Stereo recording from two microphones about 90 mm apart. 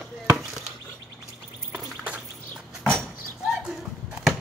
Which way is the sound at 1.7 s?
15° right (ahead or behind).